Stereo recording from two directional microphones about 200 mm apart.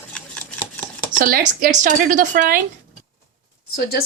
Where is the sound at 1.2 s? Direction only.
45° right (ahead or behind).